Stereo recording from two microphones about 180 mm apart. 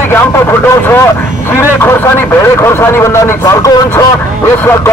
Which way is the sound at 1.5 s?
15° left (ahead or behind).